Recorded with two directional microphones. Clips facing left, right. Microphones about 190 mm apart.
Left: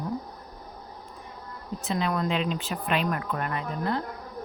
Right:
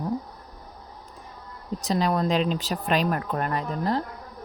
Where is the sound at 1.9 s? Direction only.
35° right (ahead or behind).